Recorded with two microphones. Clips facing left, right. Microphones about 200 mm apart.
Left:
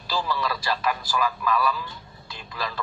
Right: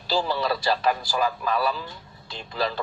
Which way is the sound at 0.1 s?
30° right (ahead or behind).